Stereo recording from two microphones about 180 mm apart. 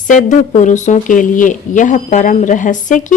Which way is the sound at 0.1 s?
45° left (ahead or behind).